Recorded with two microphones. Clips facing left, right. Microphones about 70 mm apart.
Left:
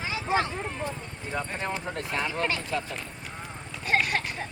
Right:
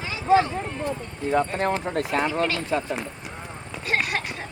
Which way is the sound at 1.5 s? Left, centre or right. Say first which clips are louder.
Right 7 dB; right.